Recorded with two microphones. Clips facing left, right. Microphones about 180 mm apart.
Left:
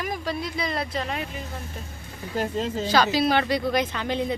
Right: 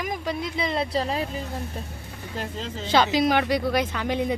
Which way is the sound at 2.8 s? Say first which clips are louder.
Right 2 dB; 20° right (ahead or behind).